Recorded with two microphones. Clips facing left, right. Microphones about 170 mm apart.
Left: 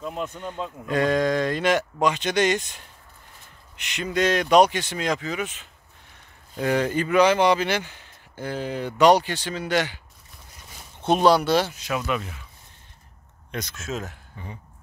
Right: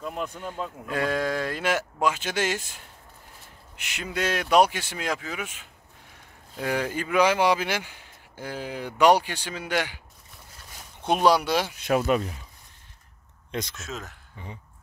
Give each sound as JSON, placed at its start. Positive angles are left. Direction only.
{"t": 0.0, "sound": "speech", "side_deg": 0}
{"t": 11.1, "sound": "speech", "side_deg": -10}
{"t": 11.7, "sound": "speech", "side_deg": -50}
{"t": 13.5, "sound": "speech", "side_deg": -25}
{"t": 13.7, "sound": "speech", "side_deg": 0}